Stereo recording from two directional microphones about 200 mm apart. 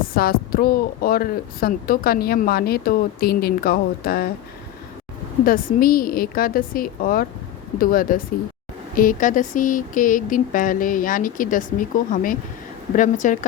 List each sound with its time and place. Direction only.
0.0 s speech: 45° left (ahead or behind)
5.5 s a woman's voice: 45° left (ahead or behind)